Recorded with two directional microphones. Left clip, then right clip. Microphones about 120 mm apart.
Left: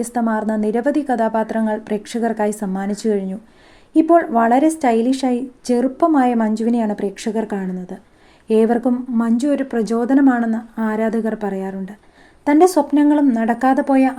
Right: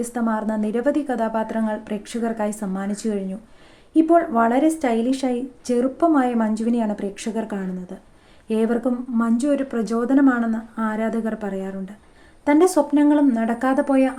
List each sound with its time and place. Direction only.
0.0 s a woman's voice: 25° left (ahead or behind)